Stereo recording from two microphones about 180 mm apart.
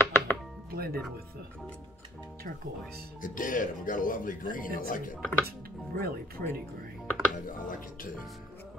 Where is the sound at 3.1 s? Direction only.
50° left (ahead or behind).